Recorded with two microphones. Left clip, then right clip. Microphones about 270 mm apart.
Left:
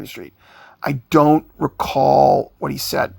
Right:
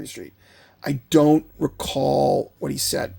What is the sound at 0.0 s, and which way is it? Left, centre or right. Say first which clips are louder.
Speech: left 3 dB; centre.